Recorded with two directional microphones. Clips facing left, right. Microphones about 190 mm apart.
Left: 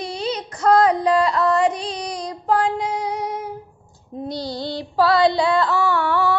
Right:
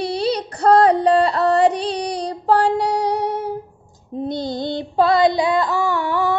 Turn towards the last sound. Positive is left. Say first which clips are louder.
# even
turn(degrees=-15)  # may be behind; listen again after turning